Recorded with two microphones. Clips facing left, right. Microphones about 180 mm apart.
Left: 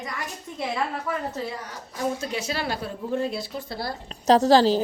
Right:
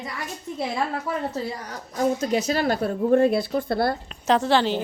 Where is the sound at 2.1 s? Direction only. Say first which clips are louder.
Right 6 dB; 40° right (ahead or behind); by 3.9 s 55° right (ahead or behind).